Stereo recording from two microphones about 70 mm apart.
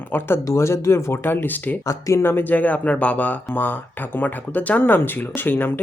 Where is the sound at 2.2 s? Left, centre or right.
Left.